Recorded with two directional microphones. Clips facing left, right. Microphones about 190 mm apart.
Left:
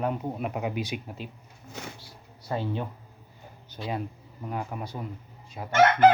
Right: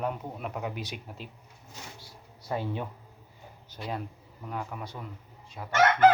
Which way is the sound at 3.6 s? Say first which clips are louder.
Left 3 dB; 25° left (ahead or behind).